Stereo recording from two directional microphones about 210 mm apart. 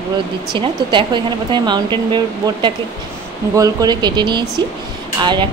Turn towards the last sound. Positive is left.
turn(degrees=-20)  # may be behind; listen again after turning